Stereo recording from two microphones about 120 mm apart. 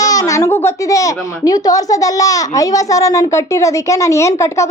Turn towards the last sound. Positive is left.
turn(degrees=25)  # may be behind; listen again after turning